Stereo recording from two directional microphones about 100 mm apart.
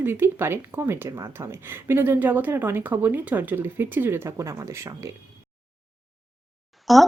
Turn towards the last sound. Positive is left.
turn(degrees=0)  # may be behind; listen again after turning